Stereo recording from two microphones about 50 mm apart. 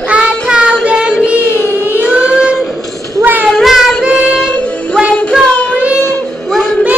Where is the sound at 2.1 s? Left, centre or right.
Centre.